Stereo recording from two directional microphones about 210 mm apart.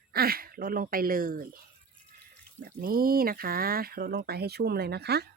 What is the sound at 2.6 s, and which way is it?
Speech, 45° right (ahead or behind).